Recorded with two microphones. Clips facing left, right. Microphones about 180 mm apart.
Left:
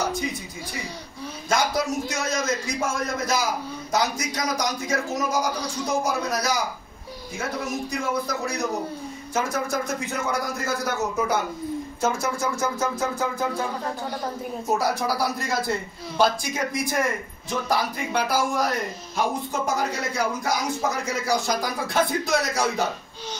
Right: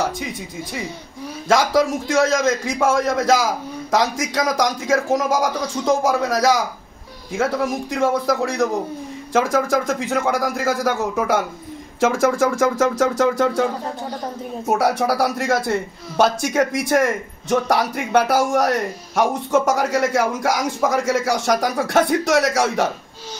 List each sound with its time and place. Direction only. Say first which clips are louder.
1.5 s a man's voice: right 7 dB; 90° right
14.8 s a man's voice: right 9 dB; 80° right